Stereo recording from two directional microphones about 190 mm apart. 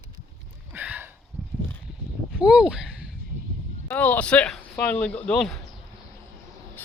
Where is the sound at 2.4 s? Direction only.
5° right (ahead or behind).